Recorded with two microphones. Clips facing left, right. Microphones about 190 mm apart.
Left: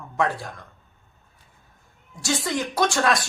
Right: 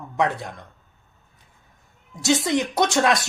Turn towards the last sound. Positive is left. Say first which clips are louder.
# right 2 dB
turn(degrees=-20)  # may be behind; listen again after turning